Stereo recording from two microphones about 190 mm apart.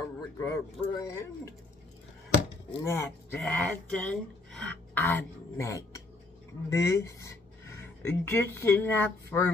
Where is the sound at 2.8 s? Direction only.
15° left (ahead or behind).